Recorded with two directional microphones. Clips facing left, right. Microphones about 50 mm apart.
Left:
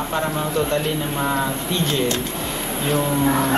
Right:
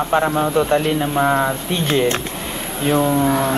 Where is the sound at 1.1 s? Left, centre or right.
Right.